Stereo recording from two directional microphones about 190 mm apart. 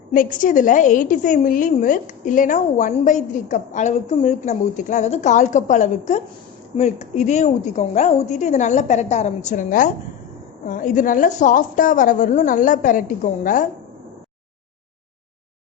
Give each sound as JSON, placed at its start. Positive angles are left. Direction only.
{"t": 0.1, "sound": "a woman's voice", "side_deg": 45}